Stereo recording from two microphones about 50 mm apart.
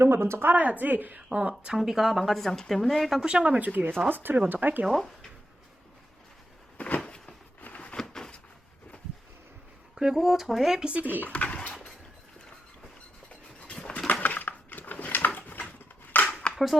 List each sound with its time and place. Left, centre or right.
0.0 s speech: right
1.3 s speech: centre
1.7 s speech: centre
3.2 s speech: centre
3.4 s speech: right
4.9 s speech: centre
6.7 s a sound: left
7.9 s a sound: centre
9.9 s speech: centre
11.0 s speech: right
11.3 s a sound: left
13.7 s patter: centre
14.1 s a sound: left